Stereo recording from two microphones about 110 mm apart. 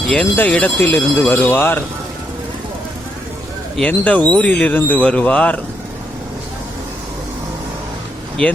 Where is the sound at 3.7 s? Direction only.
10° left (ahead or behind).